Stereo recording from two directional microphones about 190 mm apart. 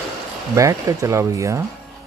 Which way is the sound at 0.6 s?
15° right (ahead or behind).